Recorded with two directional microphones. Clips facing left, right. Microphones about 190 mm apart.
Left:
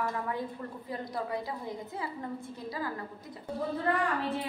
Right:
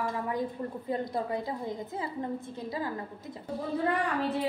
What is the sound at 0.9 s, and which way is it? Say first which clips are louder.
A woman's voice: right 4 dB; 25° right (ahead or behind).